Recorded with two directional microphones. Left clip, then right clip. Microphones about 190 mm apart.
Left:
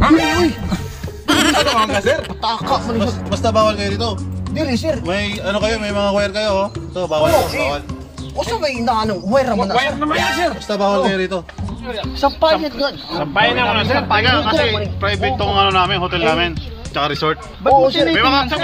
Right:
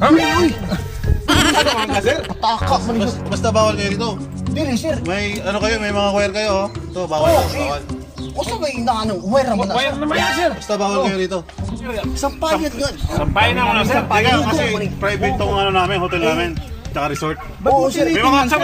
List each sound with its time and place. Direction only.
0.0 s music: centre (ahead or behind)
1.2 s a sound: centre (ahead or behind)
2.4 s speech: 10° left (ahead or behind)
3.0 s speech: 5° right (ahead or behind)
4.6 s speech: 10° left (ahead or behind)
5.1 s speech: 10° right (ahead or behind)
8.4 s speech: 10° left (ahead or behind)
10.0 s speech: centre (ahead or behind)
12.2 s speech: 15° left (ahead or behind)
14.1 s speech: 5° right (ahead or behind)